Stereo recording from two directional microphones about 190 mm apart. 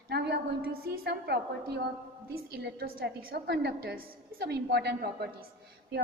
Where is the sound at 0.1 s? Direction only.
55° right (ahead or behind).